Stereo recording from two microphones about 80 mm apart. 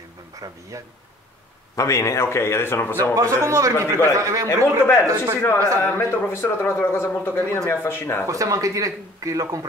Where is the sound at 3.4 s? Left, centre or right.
Right.